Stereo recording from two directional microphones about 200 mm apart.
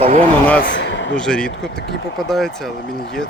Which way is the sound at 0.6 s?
65° left (ahead or behind).